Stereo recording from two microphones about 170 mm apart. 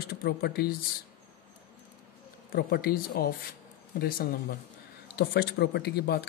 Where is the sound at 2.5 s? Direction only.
65° left (ahead or behind).